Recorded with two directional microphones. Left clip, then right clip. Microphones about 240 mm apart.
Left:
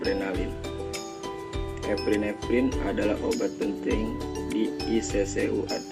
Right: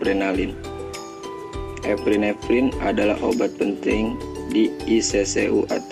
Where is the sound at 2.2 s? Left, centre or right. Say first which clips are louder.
Right 6 dB; right.